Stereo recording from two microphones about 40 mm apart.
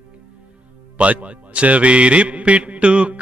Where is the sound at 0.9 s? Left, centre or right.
Right.